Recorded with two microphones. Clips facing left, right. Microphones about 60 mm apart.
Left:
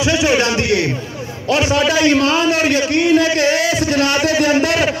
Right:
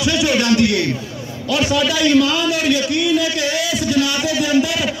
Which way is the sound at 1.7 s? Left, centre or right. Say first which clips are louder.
Left 1 dB; left.